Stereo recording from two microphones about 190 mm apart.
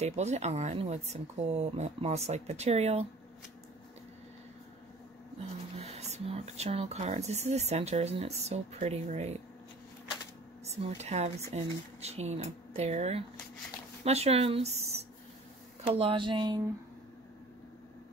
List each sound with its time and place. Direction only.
0.0 s speech: 35° right (ahead or behind)
5.8 s speech: 35° right (ahead or behind)
10.6 s speech: 35° right (ahead or behind)